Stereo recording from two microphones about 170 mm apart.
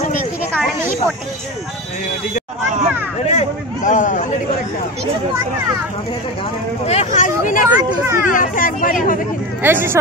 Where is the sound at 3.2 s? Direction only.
40° left (ahead or behind).